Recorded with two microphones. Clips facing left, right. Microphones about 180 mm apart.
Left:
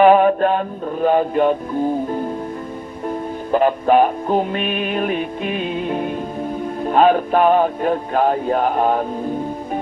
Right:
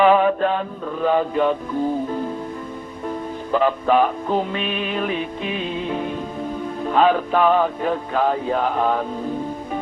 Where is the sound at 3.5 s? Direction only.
50° left (ahead or behind).